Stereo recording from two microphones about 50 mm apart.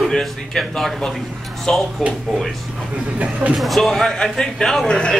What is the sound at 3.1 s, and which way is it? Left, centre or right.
Speech, right.